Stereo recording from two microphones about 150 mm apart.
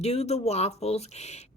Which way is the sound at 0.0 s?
45° left (ahead or behind).